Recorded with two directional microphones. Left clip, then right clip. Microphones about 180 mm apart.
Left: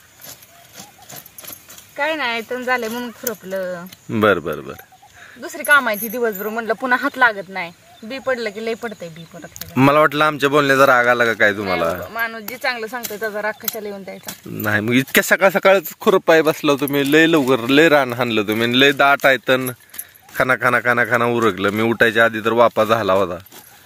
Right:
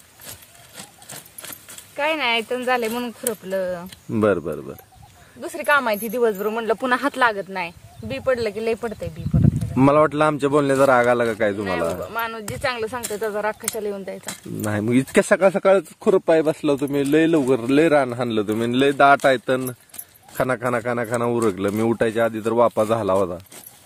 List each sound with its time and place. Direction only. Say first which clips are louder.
2.0 s speech: even; 30° right (ahead or behind)
4.1 s speech: left 4 dB; 5° right (ahead or behind)
5.4 s speech: left 4 dB; 40° right (ahead or behind)
9.6 s a man's voice: left 3 dB; 5° right (ahead or behind)
12.1 s speech: left 2 dB; 35° right (ahead or behind)
14.2 s a man's voice: left 4 dB; 10° right (ahead or behind)
15.2 s speech: left 3 dB; centre (ahead or behind)